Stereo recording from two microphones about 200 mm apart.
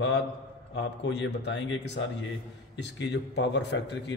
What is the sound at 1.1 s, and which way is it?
A man's voice, 60° left (ahead or behind).